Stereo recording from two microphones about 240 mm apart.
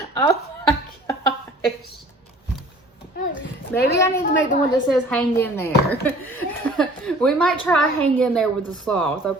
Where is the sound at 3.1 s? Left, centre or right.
Left.